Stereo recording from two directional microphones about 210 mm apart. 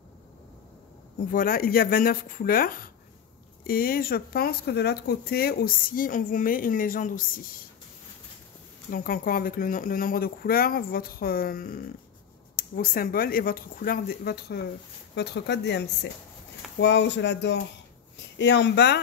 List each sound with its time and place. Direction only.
1.3 s speech: 45° left (ahead or behind)
8.9 s speech: 45° left (ahead or behind)